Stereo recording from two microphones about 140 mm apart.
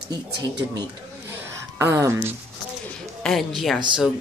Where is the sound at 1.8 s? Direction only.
20° right (ahead or behind).